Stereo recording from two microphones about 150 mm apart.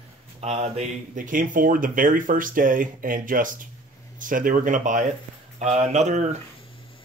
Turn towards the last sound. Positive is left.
turn(degrees=-50)  # may be behind; listen again after turning